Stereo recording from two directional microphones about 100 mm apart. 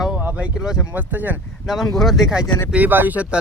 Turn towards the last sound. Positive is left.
turn(degrees=-15)  # may be behind; listen again after turning